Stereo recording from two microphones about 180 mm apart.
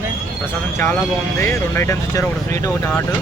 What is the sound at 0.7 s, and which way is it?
Speech, 15° left (ahead or behind).